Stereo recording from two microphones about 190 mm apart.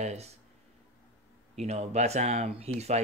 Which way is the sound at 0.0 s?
35° right (ahead or behind).